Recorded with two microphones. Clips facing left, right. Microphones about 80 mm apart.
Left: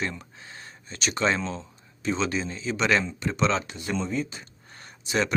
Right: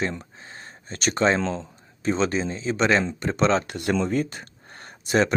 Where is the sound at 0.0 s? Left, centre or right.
Right.